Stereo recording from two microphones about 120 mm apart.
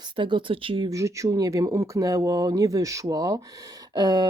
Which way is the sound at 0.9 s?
25° right (ahead or behind).